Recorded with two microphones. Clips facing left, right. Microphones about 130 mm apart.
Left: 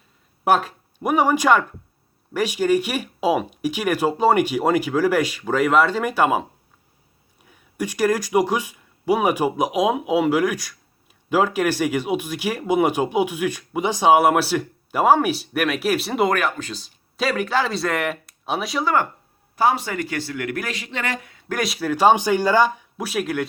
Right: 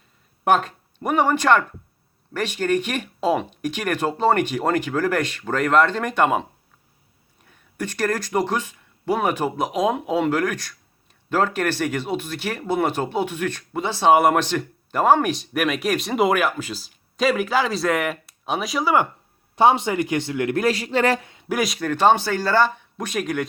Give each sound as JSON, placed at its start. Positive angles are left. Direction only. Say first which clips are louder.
{"t": 0.4, "sound": "speech", "louder": "even", "side_deg": 5}
{"t": 19.5, "sound": "speech", "louder": "right 3 dB", "side_deg": -25}
{"t": 20.7, "sound": "speech", "louder": "right 8 dB", "side_deg": -35}
{"t": 21.5, "sound": "speech", "louder": "right 1 dB", "side_deg": 0}